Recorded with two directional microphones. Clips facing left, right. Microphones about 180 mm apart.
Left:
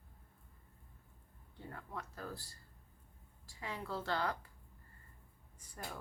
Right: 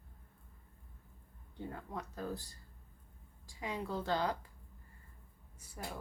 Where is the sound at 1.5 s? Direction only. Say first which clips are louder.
Right 4 dB; 20° right (ahead or behind).